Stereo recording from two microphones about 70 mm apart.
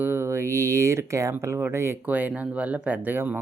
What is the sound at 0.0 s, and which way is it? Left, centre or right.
Speech, right.